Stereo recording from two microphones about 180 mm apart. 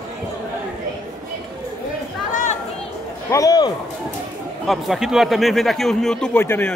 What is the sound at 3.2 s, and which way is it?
Speech, 20° left (ahead or behind).